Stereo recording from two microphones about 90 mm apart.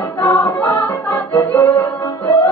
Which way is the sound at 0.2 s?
25° left (ahead or behind).